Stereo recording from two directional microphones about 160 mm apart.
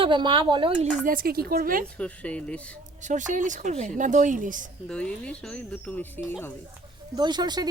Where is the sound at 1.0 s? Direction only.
60° right (ahead or behind).